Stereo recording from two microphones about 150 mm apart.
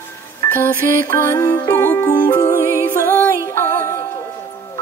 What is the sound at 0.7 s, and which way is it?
Music, 65° right (ahead or behind).